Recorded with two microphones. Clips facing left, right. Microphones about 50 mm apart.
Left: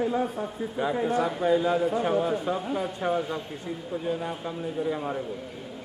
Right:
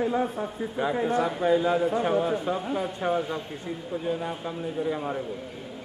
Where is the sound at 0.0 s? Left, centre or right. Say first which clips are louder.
Right 1 dB; centre.